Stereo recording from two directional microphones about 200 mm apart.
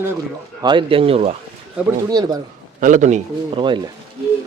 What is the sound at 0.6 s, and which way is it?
Speech, 25° right (ahead or behind).